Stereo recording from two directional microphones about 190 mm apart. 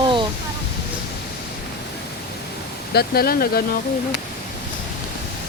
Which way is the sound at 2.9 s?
55° left (ahead or behind).